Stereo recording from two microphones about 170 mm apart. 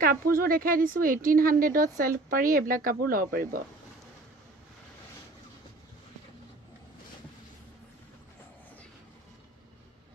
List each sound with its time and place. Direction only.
0.0 s speech: 55° right (ahead or behind)